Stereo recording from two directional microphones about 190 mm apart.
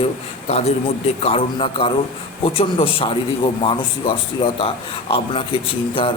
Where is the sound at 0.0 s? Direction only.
35° left (ahead or behind).